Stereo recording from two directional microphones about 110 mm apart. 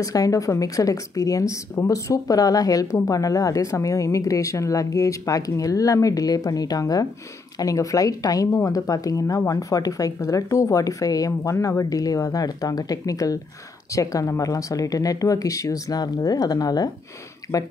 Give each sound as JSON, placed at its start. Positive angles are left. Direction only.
{"t": 0.0, "sound": "speech", "side_deg": 30}